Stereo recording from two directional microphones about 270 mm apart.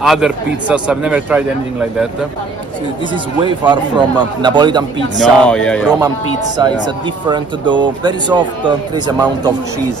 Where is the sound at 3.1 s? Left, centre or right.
Centre.